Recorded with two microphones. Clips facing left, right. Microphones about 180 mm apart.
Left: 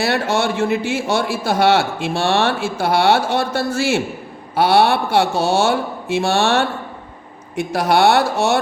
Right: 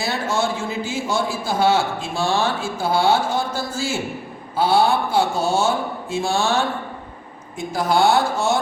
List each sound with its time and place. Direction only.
0.0 s a man's voice: 70° left (ahead or behind)